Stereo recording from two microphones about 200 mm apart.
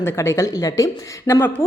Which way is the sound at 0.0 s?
15° left (ahead or behind).